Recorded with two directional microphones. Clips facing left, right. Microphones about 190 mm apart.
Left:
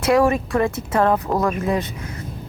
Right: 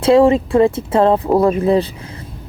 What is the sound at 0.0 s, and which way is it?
Speech, 30° right (ahead or behind).